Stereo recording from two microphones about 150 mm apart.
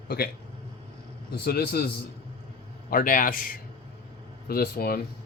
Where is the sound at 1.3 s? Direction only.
90° left.